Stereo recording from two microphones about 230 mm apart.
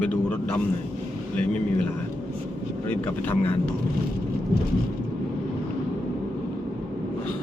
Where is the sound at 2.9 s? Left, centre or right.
Centre.